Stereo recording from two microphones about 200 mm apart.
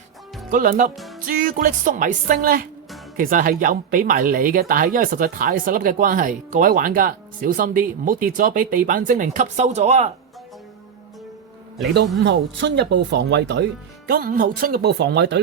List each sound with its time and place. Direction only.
0.5 s speech: 40° right (ahead or behind)
12.2 s speech: 60° right (ahead or behind)
14.1 s speech: 45° right (ahead or behind)